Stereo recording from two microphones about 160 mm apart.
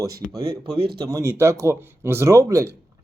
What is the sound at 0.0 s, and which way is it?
Speech, 20° right (ahead or behind).